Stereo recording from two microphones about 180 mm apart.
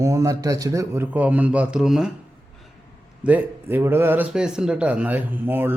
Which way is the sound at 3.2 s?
10° right (ahead or behind).